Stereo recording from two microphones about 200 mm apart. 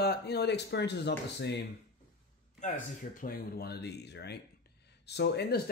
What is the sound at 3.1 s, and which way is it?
Speech, 45° left (ahead or behind).